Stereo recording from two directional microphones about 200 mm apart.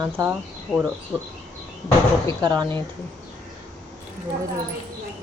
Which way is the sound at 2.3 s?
20° right (ahead or behind).